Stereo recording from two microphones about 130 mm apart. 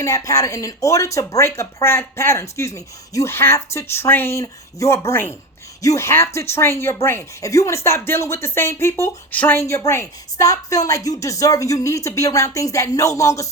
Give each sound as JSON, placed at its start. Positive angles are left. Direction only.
{"t": 0.0, "sound": "speech", "side_deg": 25}